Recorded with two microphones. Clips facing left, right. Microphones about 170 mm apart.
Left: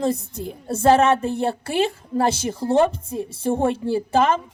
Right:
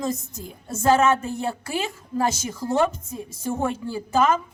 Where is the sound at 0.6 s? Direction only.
30° left (ahead or behind).